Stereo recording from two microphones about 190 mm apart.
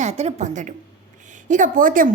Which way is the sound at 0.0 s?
35° right (ahead or behind).